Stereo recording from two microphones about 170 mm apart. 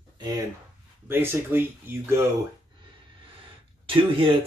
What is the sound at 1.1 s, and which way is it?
Speech, 15° right (ahead or behind).